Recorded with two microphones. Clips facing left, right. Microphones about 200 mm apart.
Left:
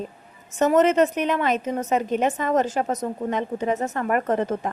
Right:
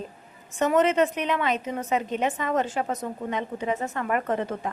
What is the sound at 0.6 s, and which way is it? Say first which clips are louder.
A woman's voice: left 3 dB; 40° left (ahead or behind).